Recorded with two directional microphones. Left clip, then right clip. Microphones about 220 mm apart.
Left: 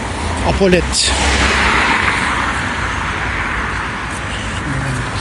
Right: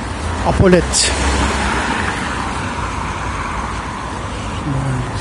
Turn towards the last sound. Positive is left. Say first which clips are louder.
# left 4 dB
turn(degrees=-40)  # may be behind; listen again after turning